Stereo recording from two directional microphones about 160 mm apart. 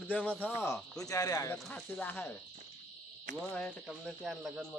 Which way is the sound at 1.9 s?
10° left (ahead or behind).